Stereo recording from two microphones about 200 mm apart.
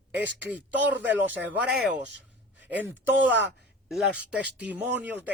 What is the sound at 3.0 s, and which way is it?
Speech, 65° right (ahead or behind).